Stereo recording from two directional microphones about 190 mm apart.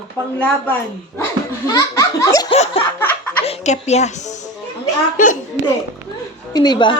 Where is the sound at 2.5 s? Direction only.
30° left (ahead or behind).